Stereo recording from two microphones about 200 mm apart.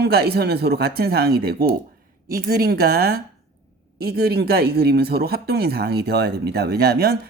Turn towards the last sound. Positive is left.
turn(degrees=-50)  # may be behind; listen again after turning